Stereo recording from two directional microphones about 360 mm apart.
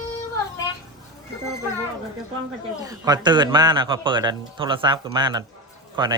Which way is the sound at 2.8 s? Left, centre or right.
Centre.